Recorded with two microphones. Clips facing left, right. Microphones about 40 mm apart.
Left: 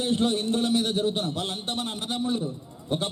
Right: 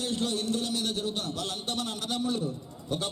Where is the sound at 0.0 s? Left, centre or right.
Left.